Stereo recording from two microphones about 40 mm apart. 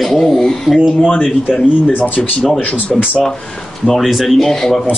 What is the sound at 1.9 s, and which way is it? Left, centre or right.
Speech, left.